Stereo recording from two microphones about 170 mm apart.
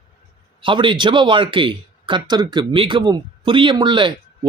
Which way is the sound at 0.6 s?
30° right (ahead or behind).